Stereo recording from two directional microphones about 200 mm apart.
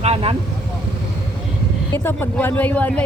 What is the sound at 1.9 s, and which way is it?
Speech, 10° left (ahead or behind).